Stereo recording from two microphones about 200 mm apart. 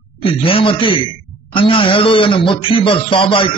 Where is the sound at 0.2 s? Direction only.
25° left (ahead or behind).